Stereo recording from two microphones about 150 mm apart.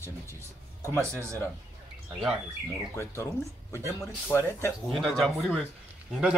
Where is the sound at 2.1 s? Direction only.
5° right (ahead or behind).